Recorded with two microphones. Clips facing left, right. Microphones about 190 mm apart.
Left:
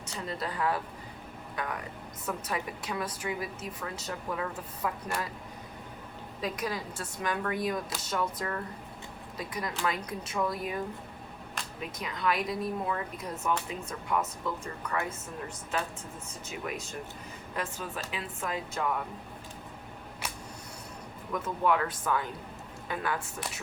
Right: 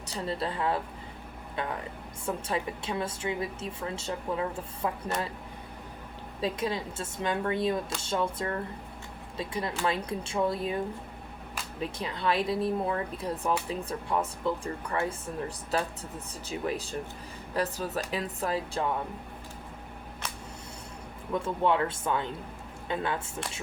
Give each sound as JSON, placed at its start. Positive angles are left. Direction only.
{"t": 0.1, "sound": "a woman's voice", "side_deg": -30}
{"t": 6.4, "sound": "a woman's voice", "side_deg": -25}
{"t": 11.8, "sound": "a woman's voice", "side_deg": -30}
{"t": 21.3, "sound": "a woman's voice", "side_deg": -25}